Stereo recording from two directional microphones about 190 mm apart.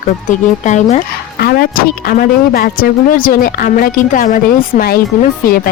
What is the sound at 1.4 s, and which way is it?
Speech, 55° left (ahead or behind).